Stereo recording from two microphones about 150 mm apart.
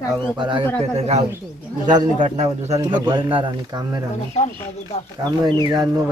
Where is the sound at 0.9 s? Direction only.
45° right (ahead or behind).